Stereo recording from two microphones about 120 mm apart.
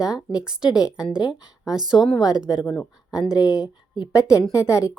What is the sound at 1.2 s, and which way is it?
Speech, 35° left (ahead or behind).